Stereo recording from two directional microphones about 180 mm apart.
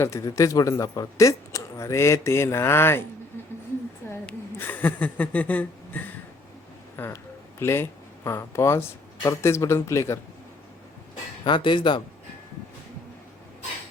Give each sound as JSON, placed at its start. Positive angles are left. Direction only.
{"t": 0.0, "sound": "speech", "side_deg": 15}
{"t": 4.1, "sound": "a sound", "side_deg": 10}
{"t": 6.9, "sound": "speech", "side_deg": 10}
{"t": 11.4, "sound": "speech", "side_deg": 25}